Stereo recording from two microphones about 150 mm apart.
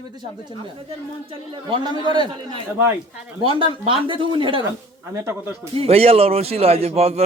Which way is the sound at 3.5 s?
35° right (ahead or behind).